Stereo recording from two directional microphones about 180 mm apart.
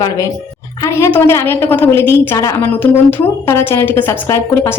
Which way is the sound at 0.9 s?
15° left (ahead or behind).